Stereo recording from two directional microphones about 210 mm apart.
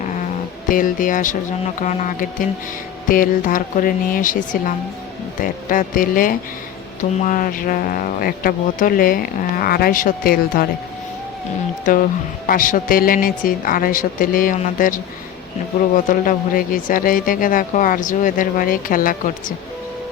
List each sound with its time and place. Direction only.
0.7 s speech: 40° left (ahead or behind)
12.5 s speech: 40° left (ahead or behind)
16.0 s speech: 40° left (ahead or behind)